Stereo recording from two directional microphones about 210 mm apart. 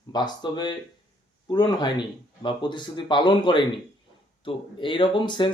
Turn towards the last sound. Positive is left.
turn(degrees=20)  # may be behind; listen again after turning